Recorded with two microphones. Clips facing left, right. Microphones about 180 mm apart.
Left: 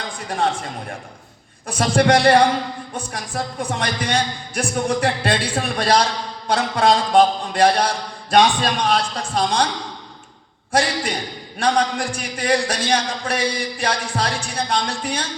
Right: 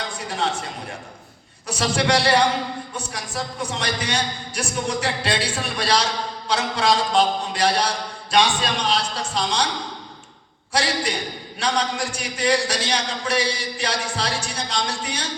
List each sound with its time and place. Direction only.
0.3 s a man's voice: 50° left (ahead or behind)
1.6 s a man's voice: 50° left (ahead or behind)
10.7 s a man's voice: 55° left (ahead or behind)